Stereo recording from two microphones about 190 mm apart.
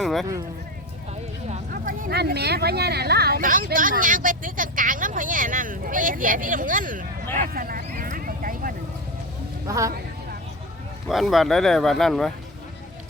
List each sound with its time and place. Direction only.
0.0 s a sound: centre (ahead or behind)
1.7 s speech: 45° right (ahead or behind)
7.3 s vehicle: 50° right (ahead or behind)
9.6 s speech: 15° right (ahead or behind)
11.1 s speech: centre (ahead or behind)